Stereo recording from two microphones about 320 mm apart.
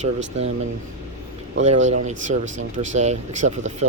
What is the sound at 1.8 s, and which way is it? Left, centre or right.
Speech, right.